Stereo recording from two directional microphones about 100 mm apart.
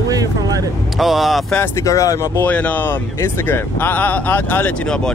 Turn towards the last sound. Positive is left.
turn(degrees=20)  # may be behind; listen again after turning